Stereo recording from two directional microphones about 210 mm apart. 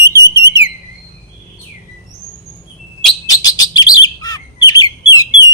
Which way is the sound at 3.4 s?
20° left (ahead or behind).